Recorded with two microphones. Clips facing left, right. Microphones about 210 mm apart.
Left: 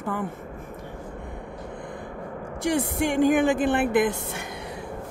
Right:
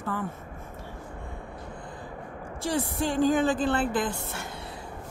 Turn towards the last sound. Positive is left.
turn(degrees=15)  # may be behind; listen again after turning